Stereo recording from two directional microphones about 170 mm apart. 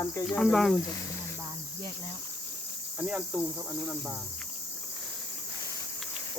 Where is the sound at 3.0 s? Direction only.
5° right (ahead or behind).